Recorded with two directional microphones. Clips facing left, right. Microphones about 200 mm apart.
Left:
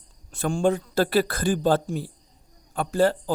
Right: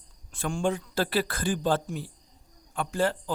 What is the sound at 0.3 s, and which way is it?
Speech, 40° left (ahead or behind).